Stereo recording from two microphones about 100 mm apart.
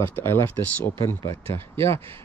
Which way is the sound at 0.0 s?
25° left (ahead or behind).